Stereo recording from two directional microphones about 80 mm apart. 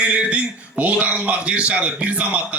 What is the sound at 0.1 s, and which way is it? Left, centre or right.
A man's voice, centre.